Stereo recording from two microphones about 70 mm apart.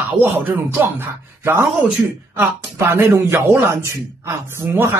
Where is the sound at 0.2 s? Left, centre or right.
Right.